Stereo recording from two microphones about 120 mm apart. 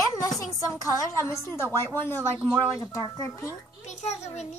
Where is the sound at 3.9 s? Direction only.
70° left (ahead or behind).